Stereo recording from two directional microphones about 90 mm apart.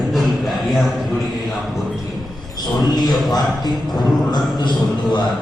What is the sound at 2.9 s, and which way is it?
A man's voice, 50° left (ahead or behind).